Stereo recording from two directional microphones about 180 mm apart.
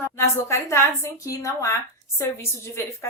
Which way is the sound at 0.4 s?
15° left (ahead or behind).